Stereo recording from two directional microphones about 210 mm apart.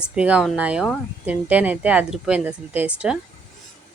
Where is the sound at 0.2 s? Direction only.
5° right (ahead or behind).